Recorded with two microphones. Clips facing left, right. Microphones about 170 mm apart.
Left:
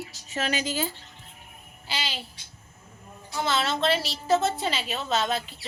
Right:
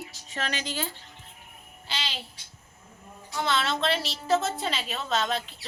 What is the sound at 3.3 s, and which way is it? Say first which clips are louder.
A woman's voice: left 1 dB; centre (ahead or behind).